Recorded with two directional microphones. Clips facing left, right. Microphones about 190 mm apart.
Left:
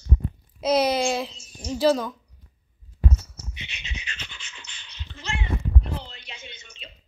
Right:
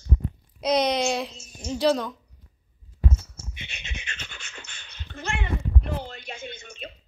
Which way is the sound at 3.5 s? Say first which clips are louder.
Even; 50° right (ahead or behind).